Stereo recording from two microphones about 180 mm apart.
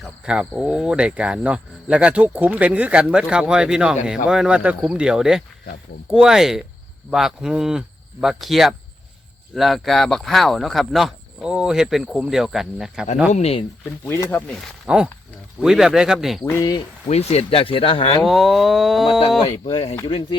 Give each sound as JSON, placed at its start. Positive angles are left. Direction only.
{"t": 0.3, "sound": "speech", "side_deg": -5}
{"t": 13.3, "sound": "speech", "side_deg": 35}
{"t": 14.0, "sound": "speech", "side_deg": 15}
{"t": 14.8, "sound": "speech", "side_deg": -5}
{"t": 16.4, "sound": "speech", "side_deg": 15}
{"t": 17.1, "sound": "speech", "side_deg": 35}
{"t": 18.2, "sound": "speech", "side_deg": 0}
{"t": 19.6, "sound": "speech", "side_deg": 35}